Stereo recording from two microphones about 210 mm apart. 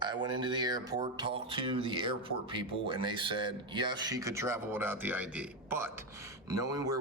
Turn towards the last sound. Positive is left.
turn(degrees=-15)  # may be behind; listen again after turning